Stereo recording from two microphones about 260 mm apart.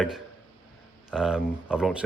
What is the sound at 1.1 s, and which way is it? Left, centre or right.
Speech, centre.